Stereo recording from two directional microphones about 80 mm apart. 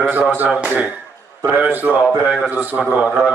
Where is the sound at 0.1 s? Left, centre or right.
Right.